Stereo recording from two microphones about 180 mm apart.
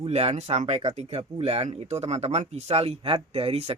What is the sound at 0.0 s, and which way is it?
Speech, 35° right (ahead or behind).